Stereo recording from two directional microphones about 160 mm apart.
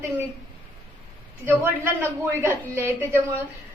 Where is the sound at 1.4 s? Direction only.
15° right (ahead or behind).